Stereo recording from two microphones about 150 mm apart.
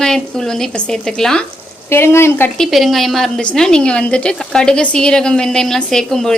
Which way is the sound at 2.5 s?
Centre (ahead or behind).